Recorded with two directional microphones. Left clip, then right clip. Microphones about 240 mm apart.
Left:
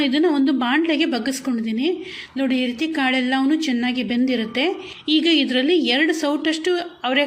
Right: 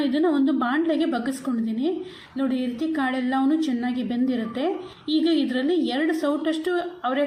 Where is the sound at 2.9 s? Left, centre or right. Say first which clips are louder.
Left 4 dB; left.